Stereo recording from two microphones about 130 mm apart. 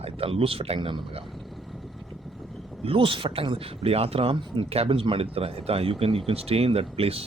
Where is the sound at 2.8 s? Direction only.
45° right (ahead or behind).